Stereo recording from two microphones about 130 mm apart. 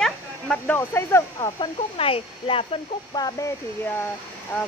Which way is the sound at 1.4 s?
45° left (ahead or behind).